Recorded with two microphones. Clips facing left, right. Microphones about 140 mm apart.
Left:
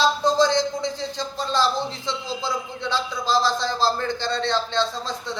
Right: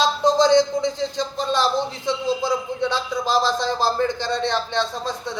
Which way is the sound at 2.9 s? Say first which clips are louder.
Left 1 dB; 15° right (ahead or behind).